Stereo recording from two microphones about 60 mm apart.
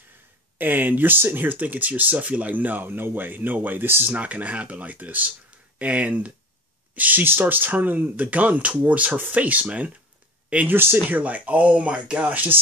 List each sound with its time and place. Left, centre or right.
0.6 s speech: right
10.7 s speech: right
11.1 s speech: right